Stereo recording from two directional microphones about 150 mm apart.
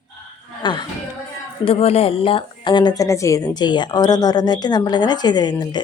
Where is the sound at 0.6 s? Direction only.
30° left (ahead or behind).